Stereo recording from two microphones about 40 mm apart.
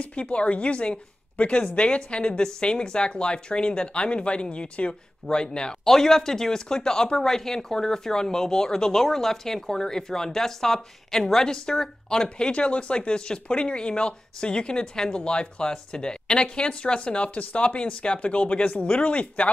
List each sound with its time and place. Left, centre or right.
0.0 s speech: left
5.9 s speech: centre; by 19.5 s left